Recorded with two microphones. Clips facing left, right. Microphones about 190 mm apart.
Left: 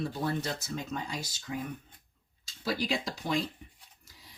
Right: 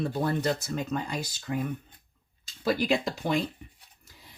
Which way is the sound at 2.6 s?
55° right (ahead or behind).